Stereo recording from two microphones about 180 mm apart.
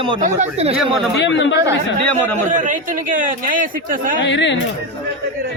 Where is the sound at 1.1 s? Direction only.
85° left.